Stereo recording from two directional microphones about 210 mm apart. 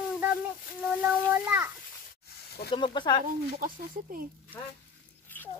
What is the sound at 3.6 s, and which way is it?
Speech, 40° right (ahead or behind).